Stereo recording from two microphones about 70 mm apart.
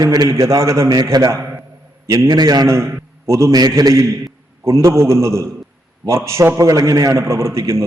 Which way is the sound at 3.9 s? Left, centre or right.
Right.